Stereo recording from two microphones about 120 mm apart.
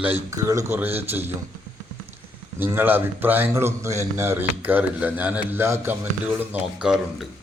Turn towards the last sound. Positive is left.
turn(degrees=-10)  # may be behind; listen again after turning